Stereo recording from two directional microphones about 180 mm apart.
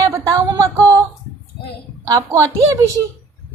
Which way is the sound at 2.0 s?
15° right (ahead or behind).